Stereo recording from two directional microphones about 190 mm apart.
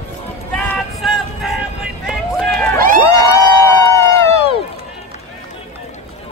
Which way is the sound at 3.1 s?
20° left (ahead or behind).